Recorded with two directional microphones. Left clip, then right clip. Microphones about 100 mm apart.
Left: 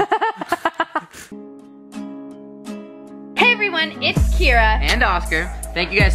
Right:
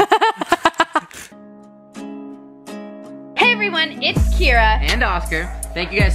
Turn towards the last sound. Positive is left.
turn(degrees=10)  # may be behind; listen again after turning